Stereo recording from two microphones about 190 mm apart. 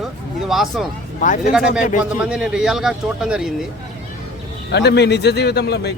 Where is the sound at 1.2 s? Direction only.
40° left (ahead or behind).